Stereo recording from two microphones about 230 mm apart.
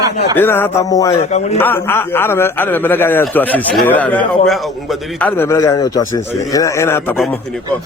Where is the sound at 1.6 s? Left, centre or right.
Centre.